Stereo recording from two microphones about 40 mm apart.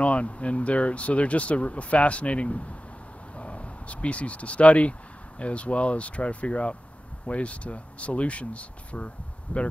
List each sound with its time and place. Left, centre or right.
0.0 s speech: left